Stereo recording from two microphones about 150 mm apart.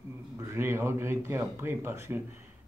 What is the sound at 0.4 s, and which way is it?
Speech, 15° right (ahead or behind).